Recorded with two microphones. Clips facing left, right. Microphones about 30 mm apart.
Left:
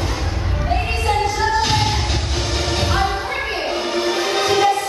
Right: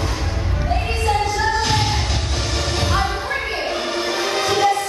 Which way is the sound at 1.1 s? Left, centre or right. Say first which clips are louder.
Left 1 dB; centre.